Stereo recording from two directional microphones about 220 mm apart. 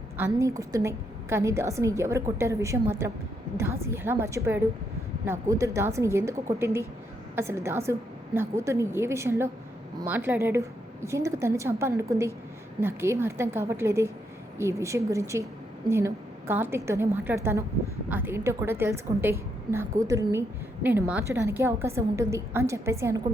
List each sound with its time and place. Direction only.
0.2 s a woman's voice: 15° right (ahead or behind)
7.3 s a woman's voice: 10° right (ahead or behind)